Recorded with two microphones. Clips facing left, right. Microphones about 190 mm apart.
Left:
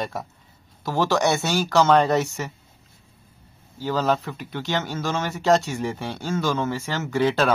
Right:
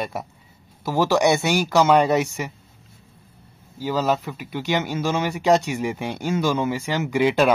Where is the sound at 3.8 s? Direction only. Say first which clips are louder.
Right 1 dB; 10° right (ahead or behind).